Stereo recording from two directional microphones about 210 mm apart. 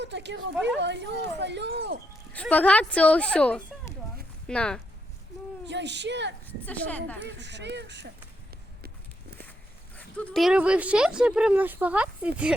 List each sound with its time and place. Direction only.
0.0 s speech: 55° right (ahead or behind)
2.3 s speech: 5° left (ahead or behind)
5.6 s speech: 55° right (ahead or behind)
6.4 s a woman's voice: 10° left (ahead or behind)
7.2 s speech: 55° right (ahead or behind)
9.9 s speech: 5° left (ahead or behind)